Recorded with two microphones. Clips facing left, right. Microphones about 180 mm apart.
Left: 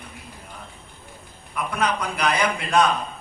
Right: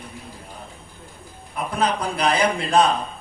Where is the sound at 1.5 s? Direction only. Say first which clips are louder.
Right 2 dB; 30° right (ahead or behind).